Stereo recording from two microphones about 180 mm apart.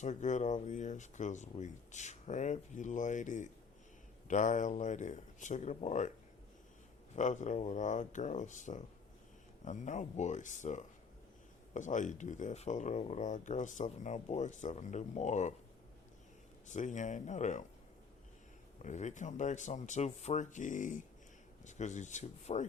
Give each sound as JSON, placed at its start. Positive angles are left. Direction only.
{"t": 0.0, "sound": "speech", "side_deg": 40}
{"t": 7.2, "sound": "speech", "side_deg": 45}
{"t": 16.7, "sound": "speech", "side_deg": 40}
{"t": 18.8, "sound": "speech", "side_deg": 40}